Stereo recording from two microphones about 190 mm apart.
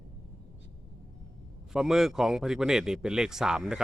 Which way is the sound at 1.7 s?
Centre (ahead or behind).